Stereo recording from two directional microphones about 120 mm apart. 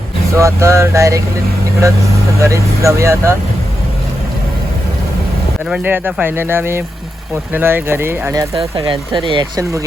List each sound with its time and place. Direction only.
0.3 s speech: 25° right (ahead or behind)
2.4 s speech: 25° right (ahead or behind)
5.6 s speech: 10° right (ahead or behind)
8.5 s speech: 40° right (ahead or behind)